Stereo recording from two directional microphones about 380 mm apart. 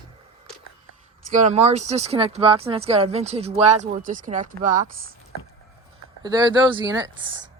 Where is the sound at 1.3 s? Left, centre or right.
Centre.